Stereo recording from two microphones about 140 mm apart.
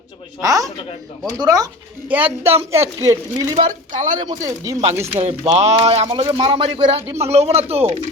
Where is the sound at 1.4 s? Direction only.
25° right (ahead or behind).